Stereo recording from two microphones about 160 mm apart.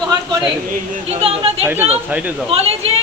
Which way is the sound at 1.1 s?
35° right (ahead or behind).